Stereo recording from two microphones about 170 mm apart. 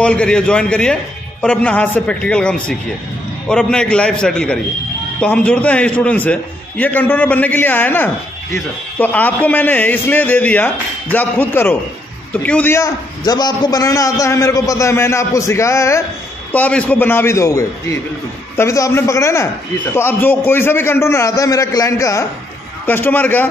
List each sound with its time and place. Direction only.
0.0 s a man's voice: 5° left (ahead or behind)